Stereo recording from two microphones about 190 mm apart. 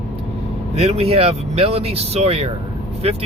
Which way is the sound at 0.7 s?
30° right (ahead or behind).